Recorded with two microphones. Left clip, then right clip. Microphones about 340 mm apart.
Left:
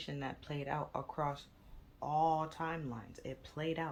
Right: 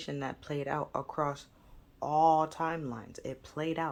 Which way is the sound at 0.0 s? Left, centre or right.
Centre.